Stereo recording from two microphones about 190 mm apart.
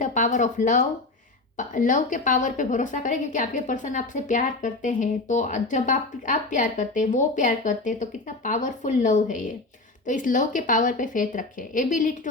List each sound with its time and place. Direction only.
0.0 s a woman's voice: 40° left (ahead or behind)